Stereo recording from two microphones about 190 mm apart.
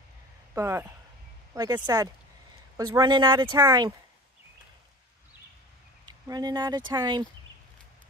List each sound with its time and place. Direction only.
0.6 s speech: 15° right (ahead or behind)
6.0 s speech: 20° right (ahead or behind)